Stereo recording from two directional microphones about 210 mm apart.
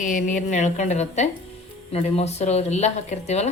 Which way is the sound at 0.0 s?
35° left (ahead or behind).